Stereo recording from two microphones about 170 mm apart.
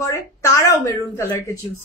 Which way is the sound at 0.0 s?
15° left (ahead or behind).